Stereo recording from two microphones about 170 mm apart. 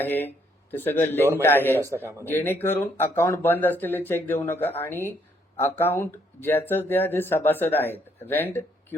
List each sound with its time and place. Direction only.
0.0 s speech: 10° left (ahead or behind)
1.8 s a man's voice: 15° right (ahead or behind)
2.2 s speech: 10° left (ahead or behind)